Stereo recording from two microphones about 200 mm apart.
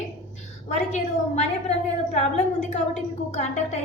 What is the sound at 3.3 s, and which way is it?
Speech, 35° left (ahead or behind).